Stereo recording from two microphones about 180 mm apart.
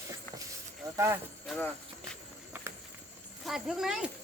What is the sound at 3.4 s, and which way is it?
Speech, centre (ahead or behind).